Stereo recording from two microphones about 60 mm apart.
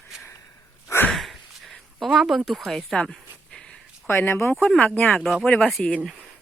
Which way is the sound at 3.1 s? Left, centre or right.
Centre.